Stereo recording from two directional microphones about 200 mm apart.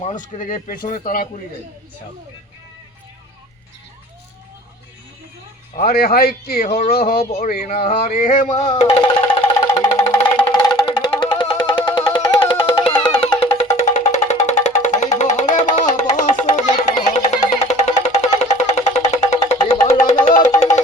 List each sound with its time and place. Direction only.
0.2 s speech: 40° left (ahead or behind)
5.7 s speech: 50° left (ahead or behind)
8.6 s speech: 20° left (ahead or behind)
9.2 s music: 10° left (ahead or behind)
10.5 s music: 20° left (ahead or behind)
13.6 s music: 35° left (ahead or behind)